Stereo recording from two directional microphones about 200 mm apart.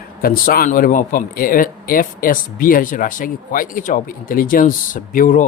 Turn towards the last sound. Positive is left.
turn(degrees=40)  # may be behind; listen again after turning